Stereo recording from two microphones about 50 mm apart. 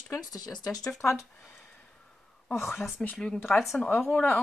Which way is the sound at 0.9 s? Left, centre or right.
Left.